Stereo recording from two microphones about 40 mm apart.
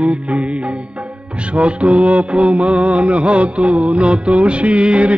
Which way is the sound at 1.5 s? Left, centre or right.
Right.